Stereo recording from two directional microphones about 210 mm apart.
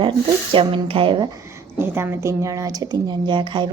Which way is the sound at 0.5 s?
25° right (ahead or behind).